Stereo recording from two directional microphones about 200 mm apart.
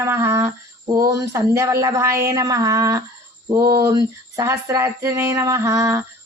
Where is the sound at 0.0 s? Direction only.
15° right (ahead or behind).